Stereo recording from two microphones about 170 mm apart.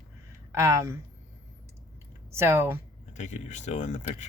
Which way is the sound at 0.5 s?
15° right (ahead or behind).